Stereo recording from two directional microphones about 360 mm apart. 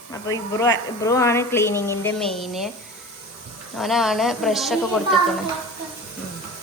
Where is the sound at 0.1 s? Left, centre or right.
Centre.